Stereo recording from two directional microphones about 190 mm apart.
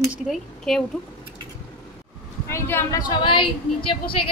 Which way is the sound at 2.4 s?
15° left (ahead or behind).